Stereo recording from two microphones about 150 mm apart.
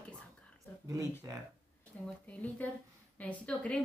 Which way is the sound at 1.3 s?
20° right (ahead or behind).